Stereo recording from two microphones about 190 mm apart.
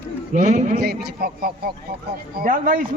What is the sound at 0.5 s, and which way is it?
Speech, 50° right (ahead or behind).